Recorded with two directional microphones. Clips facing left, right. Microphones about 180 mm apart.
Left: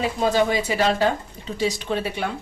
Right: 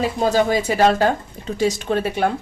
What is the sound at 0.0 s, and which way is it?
Speech, 40° right (ahead or behind).